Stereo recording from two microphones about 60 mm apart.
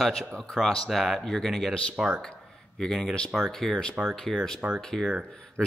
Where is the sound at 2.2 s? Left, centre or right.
Centre.